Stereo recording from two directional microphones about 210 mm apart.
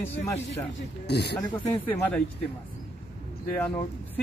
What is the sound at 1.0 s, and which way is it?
Speech, 50° left (ahead or behind).